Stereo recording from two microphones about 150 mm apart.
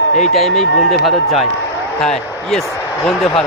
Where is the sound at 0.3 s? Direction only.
Centre (ahead or behind).